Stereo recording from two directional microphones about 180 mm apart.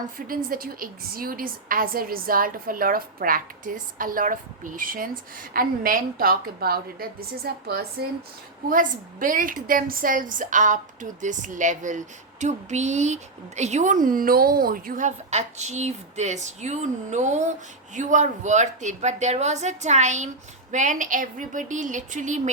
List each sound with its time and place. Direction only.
0.3 s a woman's voice: 50° right (ahead or behind)